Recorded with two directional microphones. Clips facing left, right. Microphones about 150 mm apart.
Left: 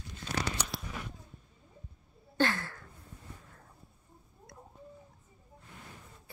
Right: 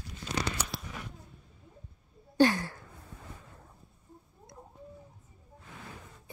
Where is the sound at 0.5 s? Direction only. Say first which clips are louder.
Right 1 dB; centre (ahead or behind).